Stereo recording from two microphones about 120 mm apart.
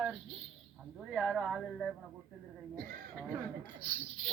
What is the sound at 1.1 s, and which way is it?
Speech, centre (ahead or behind).